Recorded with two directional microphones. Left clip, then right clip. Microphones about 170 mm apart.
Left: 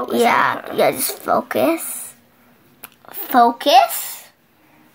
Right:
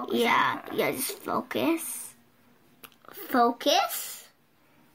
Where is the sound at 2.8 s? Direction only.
5° right (ahead or behind).